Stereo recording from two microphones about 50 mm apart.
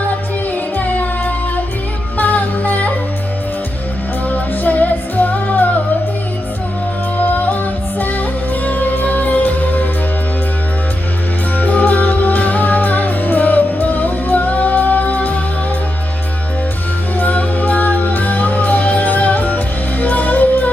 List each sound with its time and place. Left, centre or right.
2.1 s music: left
4.3 s music: left
7.2 s music: left
8.6 s music: left
11.5 s music: left
17.2 s music: left